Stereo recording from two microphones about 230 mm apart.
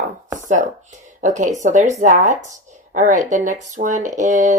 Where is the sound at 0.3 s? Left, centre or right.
Right.